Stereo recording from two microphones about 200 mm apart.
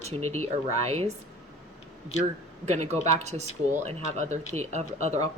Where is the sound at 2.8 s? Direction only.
35° right (ahead or behind).